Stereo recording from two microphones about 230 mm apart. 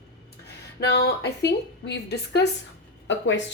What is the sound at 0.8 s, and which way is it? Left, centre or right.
Speech, left.